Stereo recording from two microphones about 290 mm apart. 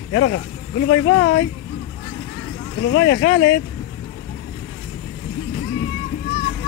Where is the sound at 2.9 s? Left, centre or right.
Left.